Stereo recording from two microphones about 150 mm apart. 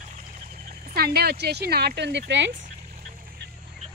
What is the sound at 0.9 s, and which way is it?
Speech, 90° right.